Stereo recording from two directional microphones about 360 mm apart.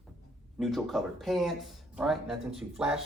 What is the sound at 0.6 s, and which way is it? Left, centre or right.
Speech, centre.